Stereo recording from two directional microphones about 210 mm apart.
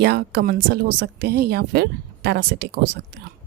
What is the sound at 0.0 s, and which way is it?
Speech, 50° right (ahead or behind).